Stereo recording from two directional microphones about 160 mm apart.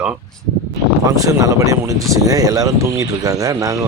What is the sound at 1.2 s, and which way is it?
Speech, 20° right (ahead or behind).